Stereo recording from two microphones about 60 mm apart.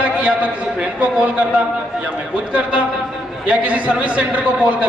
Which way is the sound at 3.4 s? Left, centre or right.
Right.